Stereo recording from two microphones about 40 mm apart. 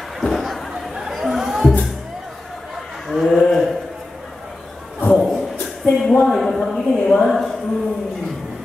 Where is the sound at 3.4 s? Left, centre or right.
Centre.